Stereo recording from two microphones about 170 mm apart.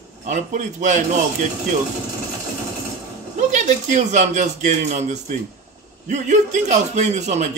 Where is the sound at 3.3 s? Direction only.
45° right (ahead or behind).